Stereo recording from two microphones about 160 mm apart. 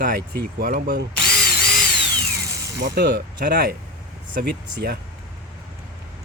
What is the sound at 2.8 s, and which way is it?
Speech, 80° right.